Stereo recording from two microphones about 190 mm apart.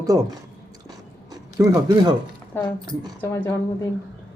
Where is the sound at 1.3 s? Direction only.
20° right (ahead or behind).